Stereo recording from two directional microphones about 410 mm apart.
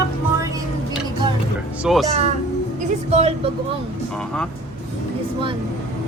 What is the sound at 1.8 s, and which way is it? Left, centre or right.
Speech, centre.